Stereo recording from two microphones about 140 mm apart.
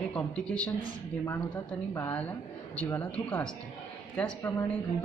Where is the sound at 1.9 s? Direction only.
15° left (ahead or behind).